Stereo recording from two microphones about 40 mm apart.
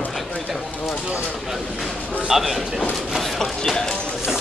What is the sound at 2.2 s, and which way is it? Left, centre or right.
Speech, centre.